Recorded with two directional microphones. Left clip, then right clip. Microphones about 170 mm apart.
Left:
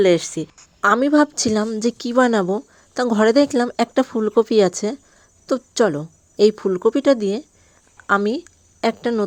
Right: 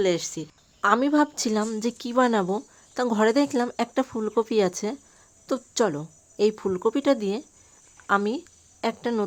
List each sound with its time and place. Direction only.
0.0 s speech: 35° left (ahead or behind)
1.6 s a woman's voice: 15° left (ahead or behind)
1.9 s speech: 30° left (ahead or behind)